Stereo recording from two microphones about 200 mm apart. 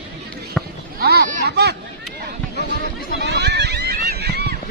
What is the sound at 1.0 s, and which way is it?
Speech, 50° right (ahead or behind).